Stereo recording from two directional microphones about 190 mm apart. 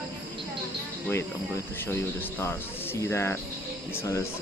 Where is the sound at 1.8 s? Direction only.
10° left (ahead or behind).